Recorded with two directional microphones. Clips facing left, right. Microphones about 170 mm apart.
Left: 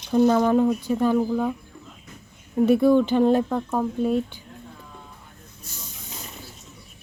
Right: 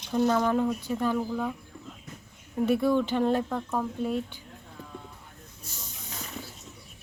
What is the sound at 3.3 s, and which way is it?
Speech, 35° left (ahead or behind).